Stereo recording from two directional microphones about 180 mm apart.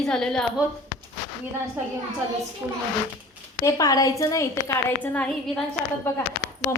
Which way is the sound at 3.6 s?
20° left (ahead or behind).